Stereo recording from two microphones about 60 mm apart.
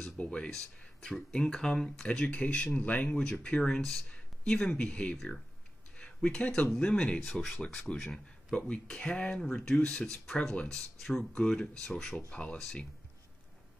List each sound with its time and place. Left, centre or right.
0.0 s a sound: centre
1.3 s speech: centre
2.0 s speech: left
3.2 s speech: centre
12.3 s speech: left